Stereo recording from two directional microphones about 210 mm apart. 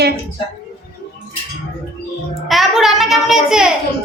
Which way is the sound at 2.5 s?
Centre (ahead or behind).